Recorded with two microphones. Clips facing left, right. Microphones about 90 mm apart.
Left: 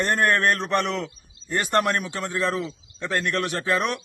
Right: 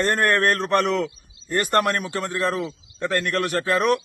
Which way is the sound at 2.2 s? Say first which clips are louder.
Right 1 dB; 40° right (ahead or behind).